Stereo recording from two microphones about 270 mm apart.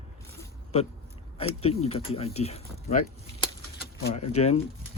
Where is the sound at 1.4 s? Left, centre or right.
Left.